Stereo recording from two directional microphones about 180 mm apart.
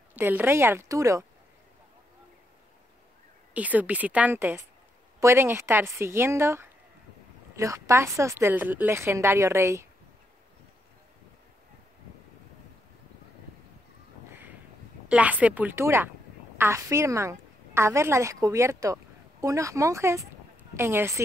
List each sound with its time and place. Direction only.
0.1 s a woman's voice: 10° right (ahead or behind)
3.5 s a woman's voice: 10° right (ahead or behind)
15.0 s a woman's voice: 10° right (ahead or behind)